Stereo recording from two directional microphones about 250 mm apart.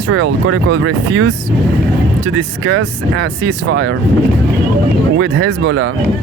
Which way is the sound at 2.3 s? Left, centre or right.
Right.